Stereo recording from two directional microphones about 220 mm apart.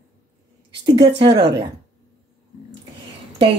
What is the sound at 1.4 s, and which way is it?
Speech, 50° right (ahead or behind).